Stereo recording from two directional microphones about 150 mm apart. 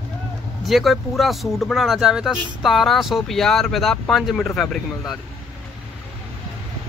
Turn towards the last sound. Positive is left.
turn(degrees=0)  # may be behind; listen again after turning